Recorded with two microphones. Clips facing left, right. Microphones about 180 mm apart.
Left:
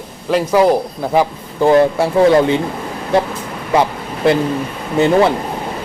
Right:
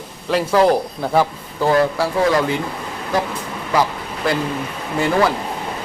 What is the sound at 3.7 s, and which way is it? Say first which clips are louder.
Vehicle: left 4 dB; 25° left (ahead or behind).